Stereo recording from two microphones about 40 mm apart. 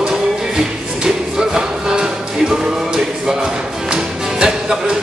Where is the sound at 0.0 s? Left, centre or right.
Centre.